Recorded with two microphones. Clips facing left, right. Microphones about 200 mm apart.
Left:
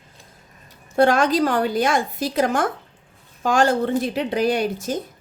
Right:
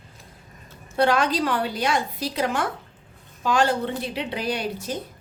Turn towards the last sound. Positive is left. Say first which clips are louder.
# left 5 dB
turn(degrees=45)  # may be behind; listen again after turning